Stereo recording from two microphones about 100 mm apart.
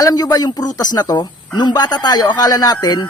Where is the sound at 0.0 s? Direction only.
40° left (ahead or behind).